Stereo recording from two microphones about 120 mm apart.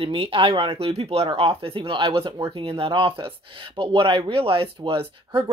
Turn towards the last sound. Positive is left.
turn(degrees=-50)  # may be behind; listen again after turning